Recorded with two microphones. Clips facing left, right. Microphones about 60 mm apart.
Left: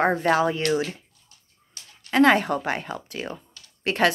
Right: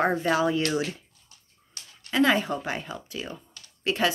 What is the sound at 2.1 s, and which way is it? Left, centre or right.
Speech, left.